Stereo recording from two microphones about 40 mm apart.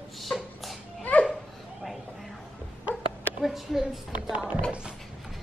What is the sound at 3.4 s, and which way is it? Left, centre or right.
Speech, centre.